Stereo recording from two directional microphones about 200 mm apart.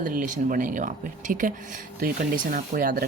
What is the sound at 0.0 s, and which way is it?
Speech, 45° right (ahead or behind).